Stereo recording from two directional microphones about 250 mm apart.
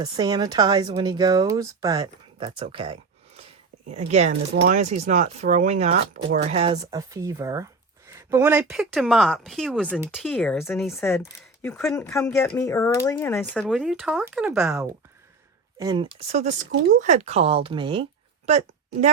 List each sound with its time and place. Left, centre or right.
0.0 s speech: centre
15.8 s a woman's voice: centre